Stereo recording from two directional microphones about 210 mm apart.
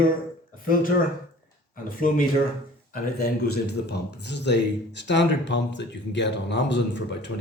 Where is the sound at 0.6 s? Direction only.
40° left (ahead or behind).